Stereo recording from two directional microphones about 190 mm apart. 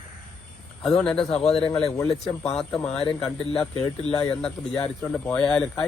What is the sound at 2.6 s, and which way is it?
Speech, 5° left (ahead or behind).